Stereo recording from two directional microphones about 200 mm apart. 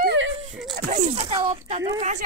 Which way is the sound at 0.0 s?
60° right (ahead or behind).